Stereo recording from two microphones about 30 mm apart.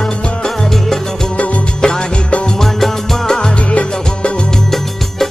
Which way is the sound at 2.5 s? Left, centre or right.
Centre.